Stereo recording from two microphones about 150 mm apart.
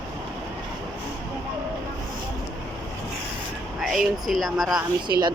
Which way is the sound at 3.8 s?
Centre (ahead or behind).